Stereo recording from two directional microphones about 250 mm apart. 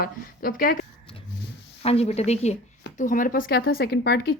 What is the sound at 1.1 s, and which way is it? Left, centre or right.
Dog, centre.